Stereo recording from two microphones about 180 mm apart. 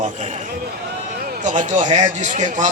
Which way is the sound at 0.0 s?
40° right (ahead or behind).